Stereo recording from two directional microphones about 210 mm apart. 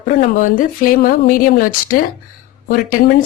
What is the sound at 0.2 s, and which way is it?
Speech, 40° left (ahead or behind).